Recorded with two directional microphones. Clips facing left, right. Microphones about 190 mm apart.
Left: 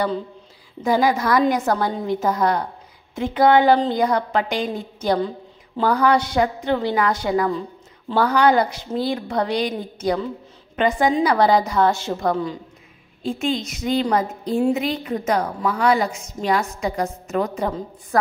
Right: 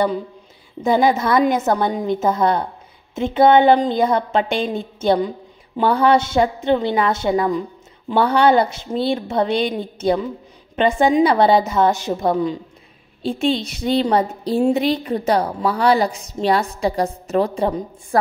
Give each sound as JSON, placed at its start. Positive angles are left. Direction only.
{"t": 0.8, "sound": "a woman's voice", "side_deg": -25}
{"t": 13.2, "sound": "a woman's voice", "side_deg": -30}